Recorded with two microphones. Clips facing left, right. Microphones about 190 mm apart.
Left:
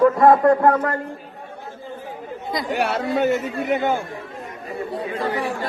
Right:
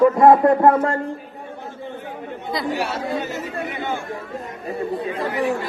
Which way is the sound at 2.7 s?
60° left (ahead or behind).